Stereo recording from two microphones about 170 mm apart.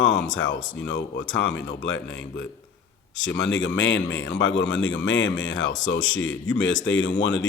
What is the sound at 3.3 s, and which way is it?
Speech, 90° left.